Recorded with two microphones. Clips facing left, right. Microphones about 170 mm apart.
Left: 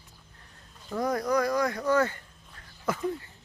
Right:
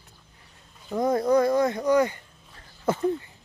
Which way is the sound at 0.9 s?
20° right (ahead or behind).